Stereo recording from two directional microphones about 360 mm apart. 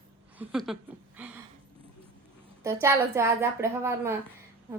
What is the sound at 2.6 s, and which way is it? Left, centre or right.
A woman's voice, centre.